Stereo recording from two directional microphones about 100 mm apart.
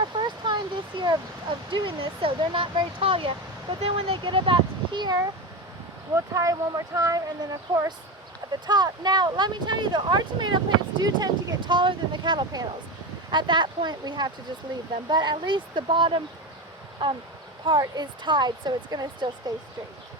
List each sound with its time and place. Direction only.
0.0 s a sound: 50° right (ahead or behind)
1.7 s speech: 55° right (ahead or behind)
6.1 s speech: 30° right (ahead or behind); by 10.6 s 50° right (ahead or behind)
11.0 s speech: 40° right (ahead or behind)